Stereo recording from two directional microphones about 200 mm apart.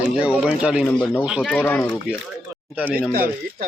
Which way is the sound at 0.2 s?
5° right (ahead or behind).